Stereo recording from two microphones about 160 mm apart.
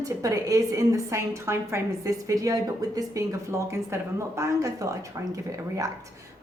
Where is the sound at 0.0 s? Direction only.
20° right (ahead or behind).